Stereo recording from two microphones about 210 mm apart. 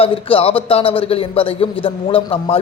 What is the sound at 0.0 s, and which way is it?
A man's voice, 25° left (ahead or behind).